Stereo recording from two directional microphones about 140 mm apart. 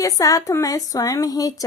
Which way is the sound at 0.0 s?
25° left (ahead or behind).